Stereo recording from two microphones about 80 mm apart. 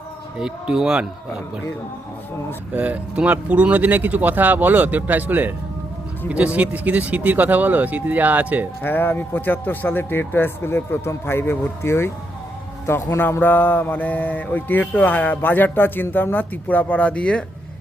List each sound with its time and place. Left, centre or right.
0.3 s speech: centre
2.7 s speech: centre
8.8 s speech: left